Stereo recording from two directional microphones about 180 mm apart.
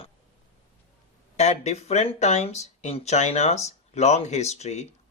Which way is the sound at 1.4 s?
40° left (ahead or behind).